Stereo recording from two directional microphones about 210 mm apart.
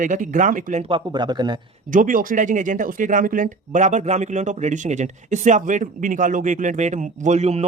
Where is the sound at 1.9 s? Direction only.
40° right (ahead or behind).